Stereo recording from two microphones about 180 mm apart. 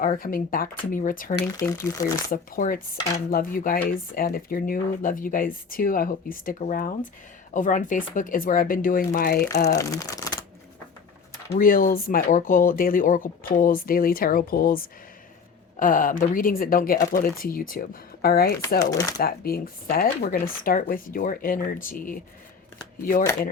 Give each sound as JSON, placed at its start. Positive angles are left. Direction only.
{"t": 0.0, "sound": "speech", "side_deg": 50}
{"t": 1.4, "sound": "speech", "side_deg": 20}
{"t": 2.3, "sound": "speech", "side_deg": 50}
{"t": 9.7, "sound": "speech", "side_deg": 20}
{"t": 11.5, "sound": "speech", "side_deg": 50}
{"t": 18.8, "sound": "speech", "side_deg": 20}
{"t": 19.2, "sound": "speech", "side_deg": 55}